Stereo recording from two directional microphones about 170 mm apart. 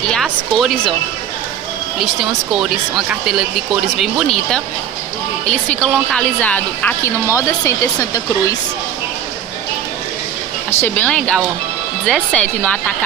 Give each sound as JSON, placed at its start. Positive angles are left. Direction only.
{"t": 0.0, "sound": "speech", "side_deg": 5}
{"t": 2.0, "sound": "a woman's voice", "side_deg": 0}
{"t": 10.8, "sound": "a woman's voice", "side_deg": 10}